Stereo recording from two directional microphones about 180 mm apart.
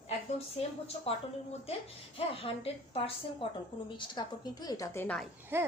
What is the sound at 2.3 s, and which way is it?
A woman's voice, 30° left (ahead or behind).